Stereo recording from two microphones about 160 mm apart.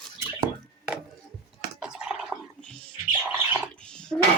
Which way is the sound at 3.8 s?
5° left (ahead or behind).